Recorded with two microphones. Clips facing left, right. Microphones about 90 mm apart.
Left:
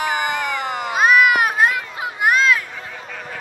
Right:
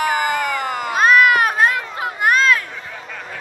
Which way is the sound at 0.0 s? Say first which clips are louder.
Right 3 dB; 20° left (ahead or behind).